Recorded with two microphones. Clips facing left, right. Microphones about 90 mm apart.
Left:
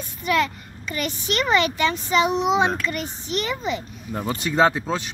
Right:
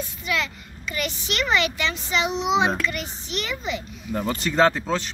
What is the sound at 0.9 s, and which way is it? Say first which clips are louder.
A child's voice: left 2 dB; 40° left (ahead or behind).